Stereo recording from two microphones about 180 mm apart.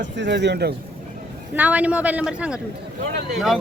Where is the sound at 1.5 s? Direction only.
10° right (ahead or behind).